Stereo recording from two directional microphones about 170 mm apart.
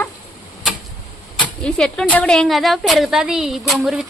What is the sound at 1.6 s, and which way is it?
A woman's voice, 5° left (ahead or behind).